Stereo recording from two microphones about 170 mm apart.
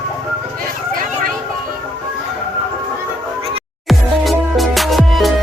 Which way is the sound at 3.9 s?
Centre (ahead or behind).